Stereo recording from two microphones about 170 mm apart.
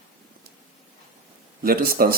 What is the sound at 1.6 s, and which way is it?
Speech, 60° right (ahead or behind).